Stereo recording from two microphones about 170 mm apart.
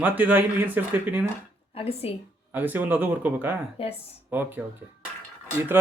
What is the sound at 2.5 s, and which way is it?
Speech, 10° right (ahead or behind).